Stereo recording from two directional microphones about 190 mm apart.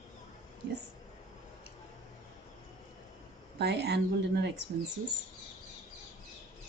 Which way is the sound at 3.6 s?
60° right (ahead or behind).